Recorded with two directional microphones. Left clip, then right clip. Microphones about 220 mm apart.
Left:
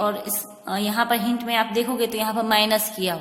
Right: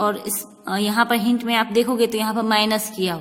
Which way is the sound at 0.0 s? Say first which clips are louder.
Right 2 dB; 30° right (ahead or behind).